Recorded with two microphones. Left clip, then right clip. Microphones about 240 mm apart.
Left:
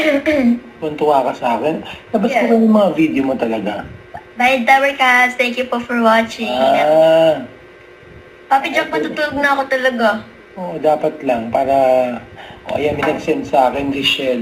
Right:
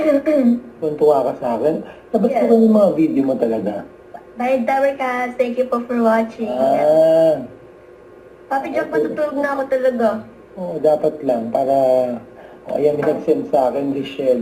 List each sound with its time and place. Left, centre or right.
0.0 s a woman's voice: centre
8.4 s a woman's voice: centre